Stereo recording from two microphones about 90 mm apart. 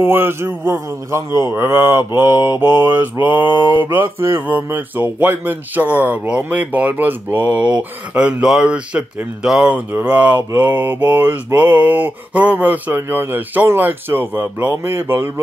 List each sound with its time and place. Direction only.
0.0 s mantra: 25° right (ahead or behind)
4.5 s speech: 20° right (ahead or behind)
10.6 s mantra: 20° right (ahead or behind)